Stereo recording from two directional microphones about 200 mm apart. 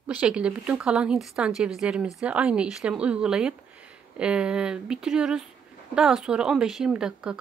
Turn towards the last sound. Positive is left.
turn(degrees=-5)  # may be behind; listen again after turning